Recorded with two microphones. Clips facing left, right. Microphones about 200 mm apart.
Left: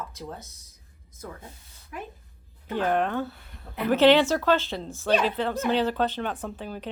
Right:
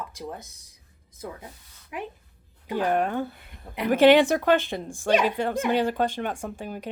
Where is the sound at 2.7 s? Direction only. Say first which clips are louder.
Right 1 dB; 10° right (ahead or behind).